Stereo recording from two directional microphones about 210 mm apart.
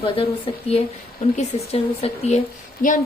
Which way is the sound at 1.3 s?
30° left (ahead or behind).